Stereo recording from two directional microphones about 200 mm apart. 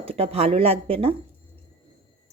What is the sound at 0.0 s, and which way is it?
Speech, 30° right (ahead or behind).